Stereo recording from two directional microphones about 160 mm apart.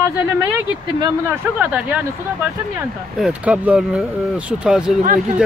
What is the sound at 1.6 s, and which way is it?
Speech, 10° right (ahead or behind).